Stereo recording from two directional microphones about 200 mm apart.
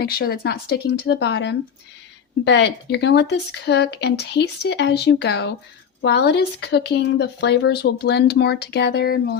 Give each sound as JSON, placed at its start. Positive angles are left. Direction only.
{"t": 0.0, "sound": "speech", "side_deg": 50}